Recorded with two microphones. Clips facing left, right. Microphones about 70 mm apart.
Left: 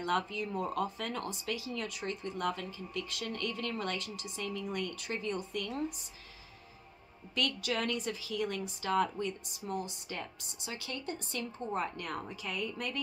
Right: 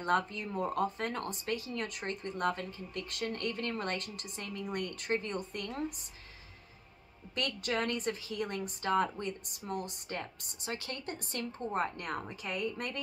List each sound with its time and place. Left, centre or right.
0.0 s speech: right
7.3 s a woman's voice: right